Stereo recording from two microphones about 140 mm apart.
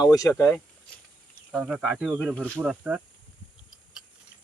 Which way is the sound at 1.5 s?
5° right (ahead or behind).